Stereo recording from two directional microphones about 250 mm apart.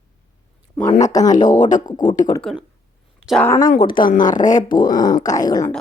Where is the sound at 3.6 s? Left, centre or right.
Left.